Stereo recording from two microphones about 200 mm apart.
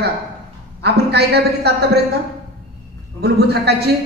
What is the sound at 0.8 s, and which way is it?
Speech, 55° right (ahead or behind).